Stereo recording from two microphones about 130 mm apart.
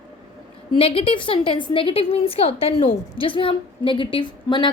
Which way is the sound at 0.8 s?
45° left (ahead or behind).